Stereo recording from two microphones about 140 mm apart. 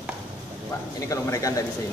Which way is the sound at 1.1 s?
25° left (ahead or behind).